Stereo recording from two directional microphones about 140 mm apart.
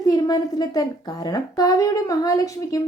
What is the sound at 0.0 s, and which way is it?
A woman's voice, 25° left (ahead or behind).